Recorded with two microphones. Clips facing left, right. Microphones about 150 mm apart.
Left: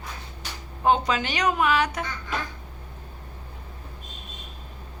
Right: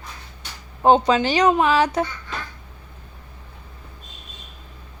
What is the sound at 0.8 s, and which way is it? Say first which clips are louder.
Speech: right 6 dB; 30° right (ahead or behind).